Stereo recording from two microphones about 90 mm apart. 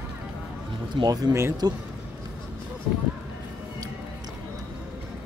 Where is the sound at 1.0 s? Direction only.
45° right (ahead or behind).